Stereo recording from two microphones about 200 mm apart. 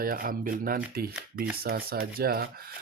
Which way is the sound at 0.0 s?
45° right (ahead or behind).